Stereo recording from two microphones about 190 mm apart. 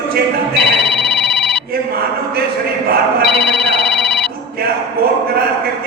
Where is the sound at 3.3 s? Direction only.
Centre (ahead or behind).